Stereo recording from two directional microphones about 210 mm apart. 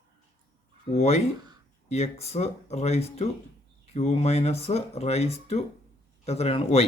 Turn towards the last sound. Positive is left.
turn(degrees=30)  # may be behind; listen again after turning